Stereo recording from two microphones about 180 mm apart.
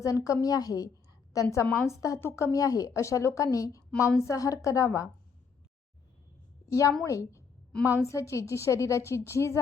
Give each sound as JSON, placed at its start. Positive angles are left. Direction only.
{"t": 0.0, "sound": "a woman's voice", "side_deg": 20}
{"t": 6.7, "sound": "a woman's voice", "side_deg": 15}